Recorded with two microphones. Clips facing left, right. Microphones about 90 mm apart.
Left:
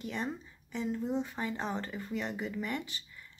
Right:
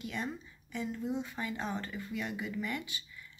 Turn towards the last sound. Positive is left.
turn(degrees=35)  # may be behind; listen again after turning